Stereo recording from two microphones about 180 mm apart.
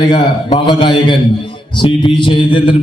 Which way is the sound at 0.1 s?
25° left (ahead or behind).